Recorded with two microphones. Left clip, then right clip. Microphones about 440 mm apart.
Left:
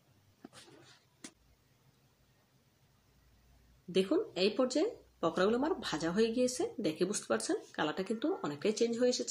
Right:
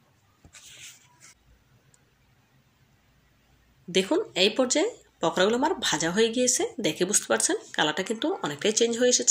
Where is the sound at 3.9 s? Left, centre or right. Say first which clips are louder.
Right 7 dB; right.